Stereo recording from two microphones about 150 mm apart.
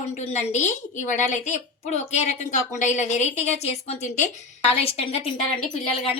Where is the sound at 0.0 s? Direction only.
50° left (ahead or behind).